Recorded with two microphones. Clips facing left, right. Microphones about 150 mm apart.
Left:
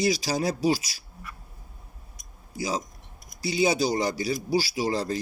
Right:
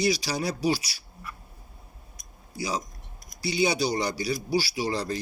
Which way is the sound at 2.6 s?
45° left (ahead or behind).